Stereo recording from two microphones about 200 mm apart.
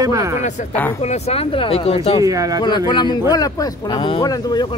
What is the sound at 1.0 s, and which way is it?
A man's voice, 30° left (ahead or behind).